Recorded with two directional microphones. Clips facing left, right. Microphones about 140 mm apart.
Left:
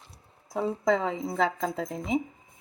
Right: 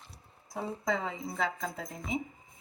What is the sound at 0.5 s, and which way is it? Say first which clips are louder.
A woman's voice: left 8 dB; 90° left.